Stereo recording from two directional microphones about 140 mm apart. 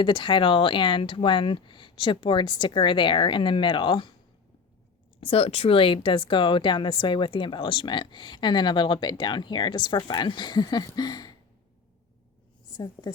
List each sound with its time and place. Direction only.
0.0 s speech: 35° left (ahead or behind)
5.2 s speech: 45° left (ahead or behind); by 11.3 s 25° left (ahead or behind)
12.7 s a woman's voice: 30° left (ahead or behind)